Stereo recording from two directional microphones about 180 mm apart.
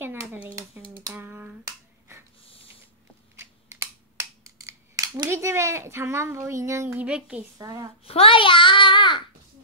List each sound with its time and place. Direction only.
0.0 s hands: 10° right (ahead or behind)
1.1 s a sound: 10° right (ahead or behind)
3.3 s scissors: 15° right (ahead or behind)
5.2 s speech: 15° right (ahead or behind)
7.5 s a woman's voice: 20° right (ahead or behind)
8.0 s child singing: 30° left (ahead or behind)